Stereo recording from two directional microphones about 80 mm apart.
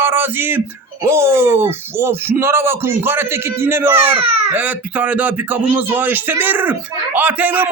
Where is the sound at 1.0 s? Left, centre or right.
Right.